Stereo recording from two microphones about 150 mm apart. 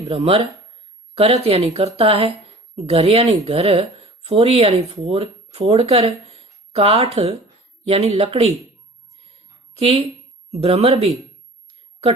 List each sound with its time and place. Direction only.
0.0 s speech: 40° right (ahead or behind)
9.7 s speech: 40° right (ahead or behind)